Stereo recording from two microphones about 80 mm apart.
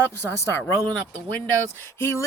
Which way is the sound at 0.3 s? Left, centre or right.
Left.